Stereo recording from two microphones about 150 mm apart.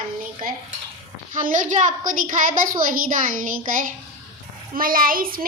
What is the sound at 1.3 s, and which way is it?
A woman's voice, 60° right (ahead or behind).